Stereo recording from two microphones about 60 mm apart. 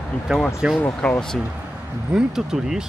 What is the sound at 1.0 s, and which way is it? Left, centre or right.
Speech, centre.